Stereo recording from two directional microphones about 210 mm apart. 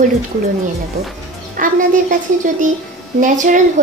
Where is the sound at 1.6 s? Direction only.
40° right (ahead or behind).